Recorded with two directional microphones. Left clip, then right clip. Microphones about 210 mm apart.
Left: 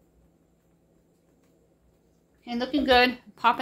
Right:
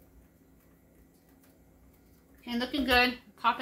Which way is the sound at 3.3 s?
55° left (ahead or behind).